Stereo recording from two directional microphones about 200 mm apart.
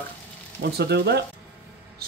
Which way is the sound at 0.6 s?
55° right (ahead or behind).